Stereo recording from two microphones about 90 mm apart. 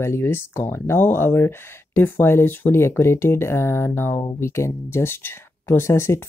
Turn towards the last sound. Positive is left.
turn(degrees=30)  # may be behind; listen again after turning